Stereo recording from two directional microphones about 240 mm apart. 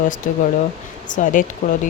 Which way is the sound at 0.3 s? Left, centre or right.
Left.